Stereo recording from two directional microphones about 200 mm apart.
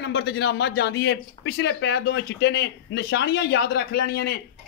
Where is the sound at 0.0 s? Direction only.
60° left (ahead or behind).